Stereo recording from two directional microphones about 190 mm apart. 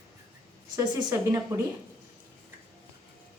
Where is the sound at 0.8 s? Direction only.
15° right (ahead or behind).